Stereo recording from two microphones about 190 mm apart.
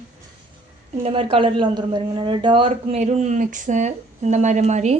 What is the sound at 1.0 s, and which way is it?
A woman's voice, 30° right (ahead or behind).